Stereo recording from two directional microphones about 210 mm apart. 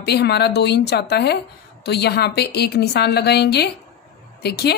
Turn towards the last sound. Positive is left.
turn(degrees=50)  # may be behind; listen again after turning